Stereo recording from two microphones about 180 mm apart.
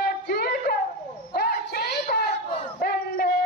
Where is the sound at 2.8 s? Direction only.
60° left (ahead or behind).